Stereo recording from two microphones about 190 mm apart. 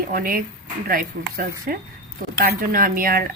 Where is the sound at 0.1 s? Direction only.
50° right (ahead or behind).